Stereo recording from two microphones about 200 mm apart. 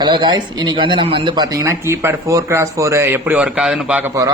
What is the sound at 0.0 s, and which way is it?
Speech, 20° right (ahead or behind).